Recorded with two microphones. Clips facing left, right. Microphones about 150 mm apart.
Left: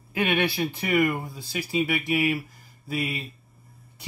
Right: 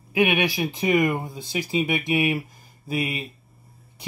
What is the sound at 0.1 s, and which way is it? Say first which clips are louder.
Speech: right 3 dB; 15° right (ahead or behind).